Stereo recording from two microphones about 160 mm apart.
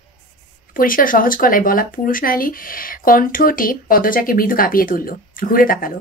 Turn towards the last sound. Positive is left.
turn(degrees=60)  # may be behind; listen again after turning